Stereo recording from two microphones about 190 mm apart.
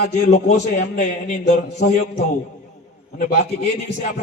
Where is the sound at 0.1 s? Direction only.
40° left (ahead or behind).